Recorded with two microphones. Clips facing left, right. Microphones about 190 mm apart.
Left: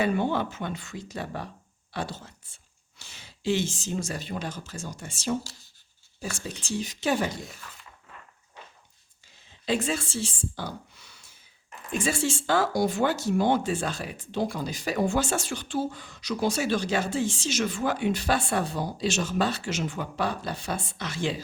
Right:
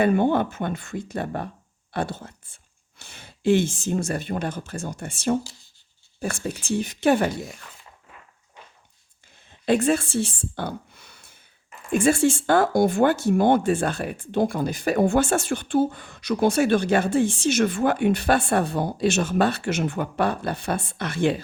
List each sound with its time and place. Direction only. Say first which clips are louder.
0.0 s speech: right 6 dB; 55° right (ahead or behind)
9.5 s a woman's voice: right 7 dB; 55° right (ahead or behind)